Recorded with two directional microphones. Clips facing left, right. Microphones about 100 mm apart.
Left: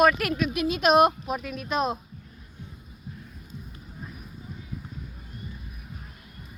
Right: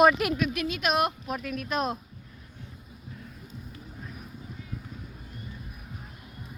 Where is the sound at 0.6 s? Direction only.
20° left (ahead or behind).